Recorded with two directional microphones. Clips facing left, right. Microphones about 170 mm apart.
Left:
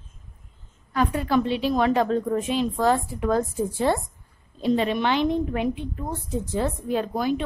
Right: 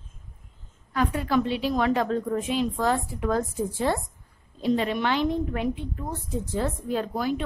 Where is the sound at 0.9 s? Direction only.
30° left (ahead or behind).